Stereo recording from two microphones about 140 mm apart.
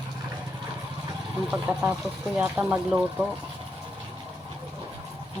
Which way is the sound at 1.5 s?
10° right (ahead or behind).